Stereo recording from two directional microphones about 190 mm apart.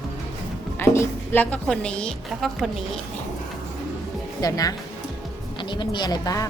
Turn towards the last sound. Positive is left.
turn(degrees=20)  # may be behind; listen again after turning